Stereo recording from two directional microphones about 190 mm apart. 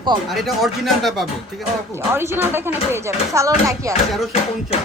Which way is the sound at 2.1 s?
10° right (ahead or behind).